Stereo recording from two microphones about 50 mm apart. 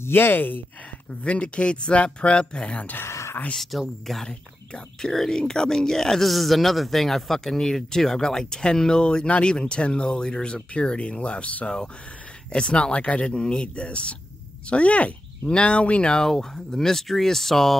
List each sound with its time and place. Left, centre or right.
0.0 s speech: left
1.2 s speech: left
3.0 s a sound: left
3.7 s speech: centre
4.1 s speech: centre
16.3 s speech: centre